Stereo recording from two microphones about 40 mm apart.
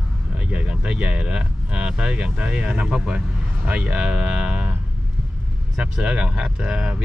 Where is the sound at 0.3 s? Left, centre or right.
Right.